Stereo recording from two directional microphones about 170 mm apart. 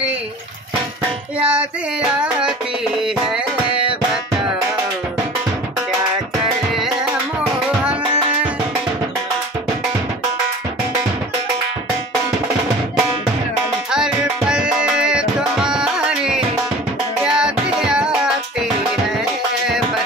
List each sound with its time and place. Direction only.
1.4 s music: 5° right (ahead or behind)
13.8 s music: 5° right (ahead or behind)